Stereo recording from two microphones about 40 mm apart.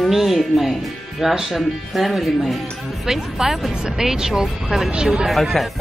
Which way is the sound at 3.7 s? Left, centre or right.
Right.